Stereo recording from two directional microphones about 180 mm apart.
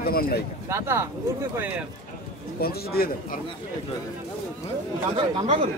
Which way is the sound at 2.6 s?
60° left (ahead or behind).